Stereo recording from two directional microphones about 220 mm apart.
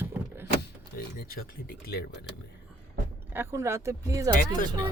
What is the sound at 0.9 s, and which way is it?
Speech, 40° left (ahead or behind).